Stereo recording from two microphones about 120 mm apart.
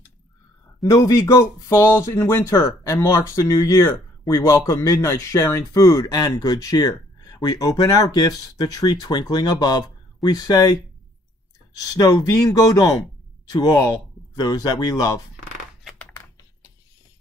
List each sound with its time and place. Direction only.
0.8 s speech: 30° left (ahead or behind)